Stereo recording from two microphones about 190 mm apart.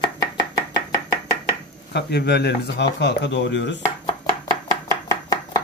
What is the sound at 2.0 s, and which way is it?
Speech, 60° left (ahead or behind).